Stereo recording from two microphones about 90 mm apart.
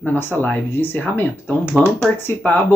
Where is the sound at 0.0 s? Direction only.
20° left (ahead or behind).